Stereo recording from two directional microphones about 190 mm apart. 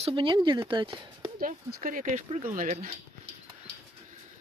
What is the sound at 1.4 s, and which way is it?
Speech, 45° right (ahead or behind).